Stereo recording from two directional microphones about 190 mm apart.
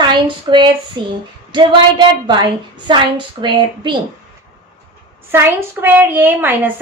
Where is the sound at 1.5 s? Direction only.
25° right (ahead or behind).